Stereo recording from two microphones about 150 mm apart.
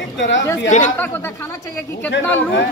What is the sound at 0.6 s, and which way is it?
Speech, 55° left (ahead or behind).